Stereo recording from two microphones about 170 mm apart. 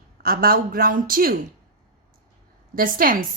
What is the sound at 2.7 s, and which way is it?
Speech, 60° right (ahead or behind).